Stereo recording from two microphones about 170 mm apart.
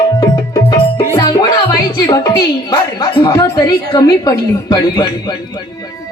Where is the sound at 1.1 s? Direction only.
20° left (ahead or behind).